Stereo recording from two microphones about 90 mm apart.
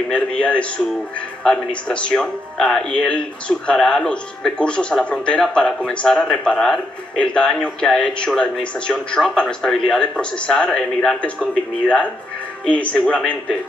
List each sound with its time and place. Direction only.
0.1 s speech: 10° left (ahead or behind)
12.6 s speech: 15° left (ahead or behind)